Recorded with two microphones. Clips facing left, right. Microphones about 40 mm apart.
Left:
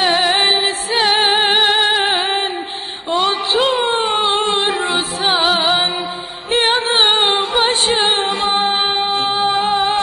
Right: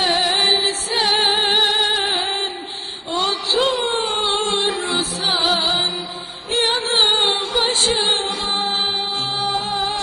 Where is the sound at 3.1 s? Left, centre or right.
Left.